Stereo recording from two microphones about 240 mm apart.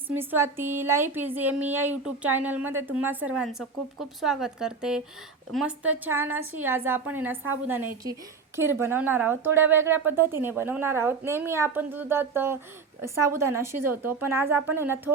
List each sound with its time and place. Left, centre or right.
0.1 s speech: centre
13.8 s speech: right
14.3 s speech: centre